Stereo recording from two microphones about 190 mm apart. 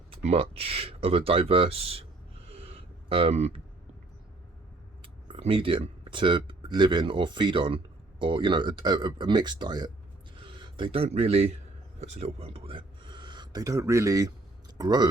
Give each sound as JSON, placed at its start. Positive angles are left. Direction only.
{"t": 0.1, "sound": "speech", "side_deg": -30}
{"t": 2.6, "sound": "a sound", "side_deg": -30}
{"t": 5.0, "sound": "speech", "side_deg": -30}